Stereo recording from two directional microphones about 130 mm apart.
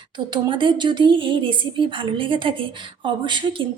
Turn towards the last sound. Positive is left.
turn(degrees=-40)  # may be behind; listen again after turning